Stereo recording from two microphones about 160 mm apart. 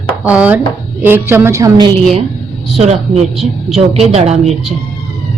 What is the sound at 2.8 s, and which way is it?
A woman's voice, 40° right (ahead or behind).